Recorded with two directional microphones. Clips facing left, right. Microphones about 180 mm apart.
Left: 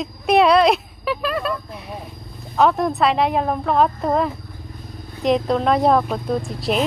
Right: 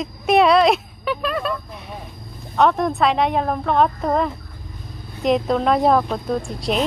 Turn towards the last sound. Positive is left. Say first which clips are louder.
# left 1 dB
turn(degrees=0)  # may be behind; listen again after turning